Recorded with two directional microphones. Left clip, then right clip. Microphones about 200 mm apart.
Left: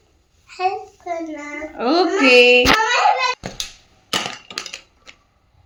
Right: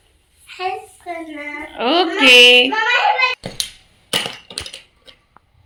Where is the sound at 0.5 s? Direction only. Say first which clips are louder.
Left 2 dB; 40° left (ahead or behind).